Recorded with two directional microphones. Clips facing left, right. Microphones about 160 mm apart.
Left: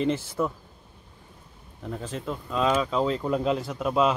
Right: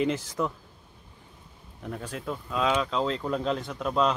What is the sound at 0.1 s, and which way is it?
Speech, 5° left (ahead or behind).